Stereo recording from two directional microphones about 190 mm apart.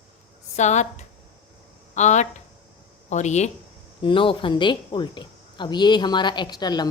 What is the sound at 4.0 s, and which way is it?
Speech, 25° left (ahead or behind).